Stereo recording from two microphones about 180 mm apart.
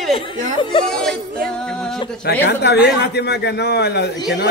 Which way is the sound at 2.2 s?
65° left (ahead or behind).